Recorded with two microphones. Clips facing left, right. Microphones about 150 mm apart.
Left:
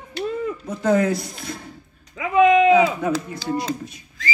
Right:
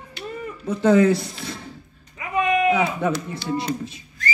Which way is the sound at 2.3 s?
90° left.